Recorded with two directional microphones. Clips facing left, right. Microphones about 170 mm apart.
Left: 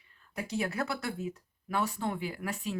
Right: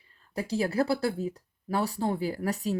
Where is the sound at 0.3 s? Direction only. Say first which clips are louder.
Right 6 dB; 35° right (ahead or behind).